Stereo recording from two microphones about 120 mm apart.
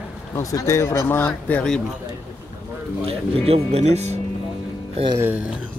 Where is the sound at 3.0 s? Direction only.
55° right (ahead or behind).